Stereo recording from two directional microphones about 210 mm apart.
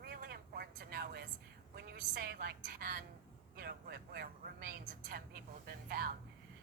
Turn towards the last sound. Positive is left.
turn(degrees=-45)  # may be behind; listen again after turning